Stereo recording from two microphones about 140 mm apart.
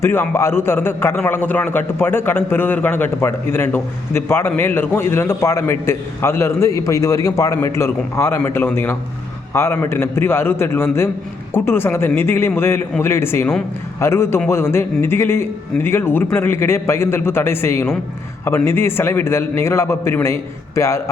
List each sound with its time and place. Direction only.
0.0 s a man's voice: 20° left (ahead or behind)